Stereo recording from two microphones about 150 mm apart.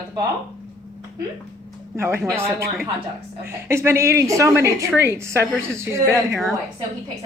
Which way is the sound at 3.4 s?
15° right (ahead or behind).